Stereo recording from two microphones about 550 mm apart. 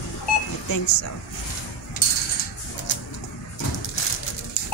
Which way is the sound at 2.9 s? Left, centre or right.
Centre.